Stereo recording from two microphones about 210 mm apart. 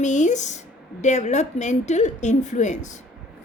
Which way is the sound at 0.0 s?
35° left (ahead or behind).